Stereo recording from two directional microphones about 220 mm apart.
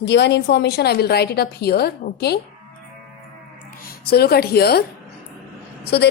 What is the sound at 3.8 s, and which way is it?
Speech, 45° left (ahead or behind).